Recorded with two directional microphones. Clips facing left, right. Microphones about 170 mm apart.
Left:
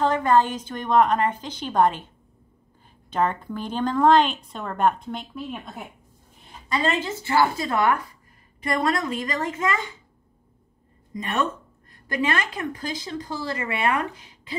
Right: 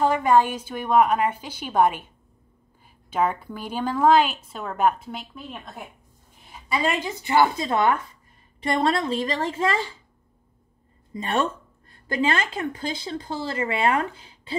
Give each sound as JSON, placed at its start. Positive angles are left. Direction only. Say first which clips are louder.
{"t": 0.0, "sound": "a woman's voice", "louder": "right 1 dB", "side_deg": -10}
{"t": 3.1, "sound": "a woman's voice", "louder": "even", "side_deg": -10}
{"t": 6.7, "sound": "speech", "louder": "even", "side_deg": -10}
{"t": 11.1, "sound": "speech", "louder": "right 1 dB", "side_deg": -30}